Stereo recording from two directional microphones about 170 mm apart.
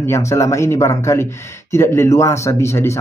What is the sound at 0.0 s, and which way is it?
Speech, 15° left (ahead or behind).